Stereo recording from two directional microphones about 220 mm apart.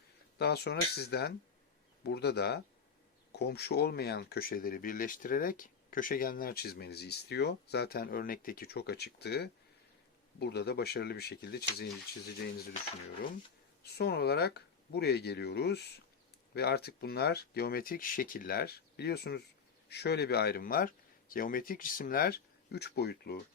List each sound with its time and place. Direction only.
0.3 s speech: 45° left (ahead or behind)
13.8 s speech: 45° left (ahead or behind)